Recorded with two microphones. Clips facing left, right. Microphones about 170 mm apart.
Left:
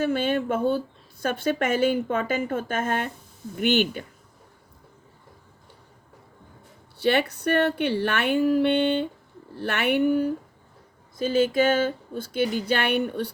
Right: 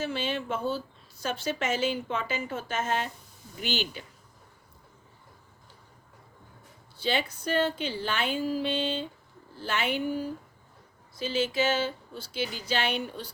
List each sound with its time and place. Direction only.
0.0 s speech: 55° left (ahead or behind)
6.9 s speech: 65° left (ahead or behind)
11.2 s speech: 50° left (ahead or behind)